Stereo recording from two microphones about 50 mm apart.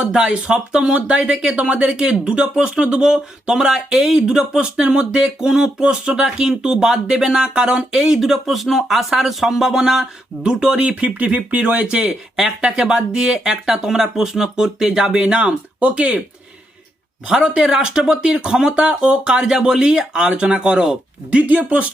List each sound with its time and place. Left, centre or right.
0.1 s speech: centre
10.5 s speech: centre
17.2 s speech: centre
21.2 s speech: right